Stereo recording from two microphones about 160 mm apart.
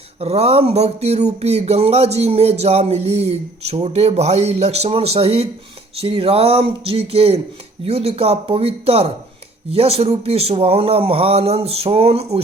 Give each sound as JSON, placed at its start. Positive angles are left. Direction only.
{"t": 0.2, "sound": "speech", "side_deg": -40}